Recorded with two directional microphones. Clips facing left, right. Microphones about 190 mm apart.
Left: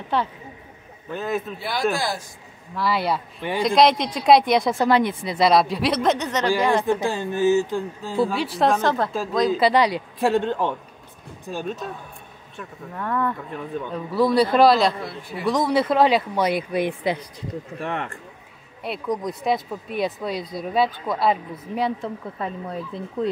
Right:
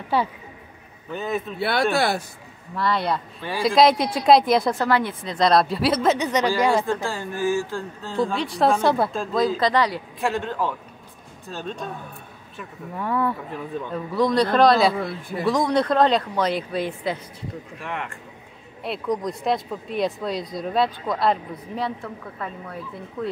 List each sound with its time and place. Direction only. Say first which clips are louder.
0.1 s speech: right 1 dB; 10° right (ahead or behind)
1.6 s speech: right 6 dB; 65° right (ahead or behind)
2.7 s speech: even; 5° left (ahead or behind)
4.7 s speech: left 3 dB; 15° left (ahead or behind); by 6.9 s 10° right (ahead or behind)
6.9 s speech: left 4 dB; 20° left (ahead or behind); by 9.1 s 10° right (ahead or behind)
9.5 s speech: left 3 dB; 10° left (ahead or behind)
10.1 s a woman's voice: left 7 dB; 35° left (ahead or behind)
11.4 s speech: left 3 dB; 10° left (ahead or behind)
12.5 s speech: right 1 dB; 5° right (ahead or behind); by 17.2 s 15° left (ahead or behind)
17.7 s speech: left 4 dB; 35° left (ahead or behind)
18.8 s speech: right 1 dB; centre (ahead or behind)
21.7 s a woman's voice: left 4 dB; 15° left (ahead or behind)